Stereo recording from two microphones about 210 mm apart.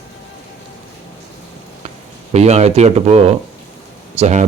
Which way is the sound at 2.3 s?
30° right (ahead or behind).